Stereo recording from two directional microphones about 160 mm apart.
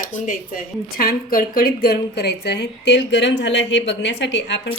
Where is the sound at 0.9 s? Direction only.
65° left (ahead or behind).